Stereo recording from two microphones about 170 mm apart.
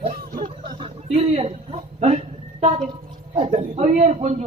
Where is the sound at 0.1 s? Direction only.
50° right (ahead or behind).